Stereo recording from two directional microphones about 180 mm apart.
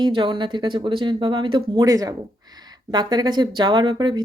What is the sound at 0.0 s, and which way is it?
Speech, 25° right (ahead or behind).